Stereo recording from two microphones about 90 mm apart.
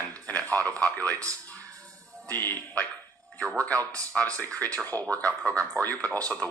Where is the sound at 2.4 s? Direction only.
20° left (ahead or behind).